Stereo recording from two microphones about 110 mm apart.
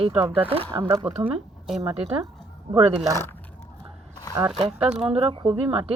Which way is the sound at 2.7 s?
60° right (ahead or behind).